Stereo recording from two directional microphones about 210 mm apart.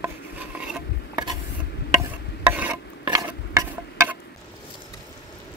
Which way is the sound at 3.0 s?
15° right (ahead or behind).